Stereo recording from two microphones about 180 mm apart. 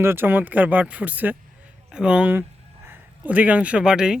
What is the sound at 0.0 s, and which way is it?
Speech, 10° right (ahead or behind).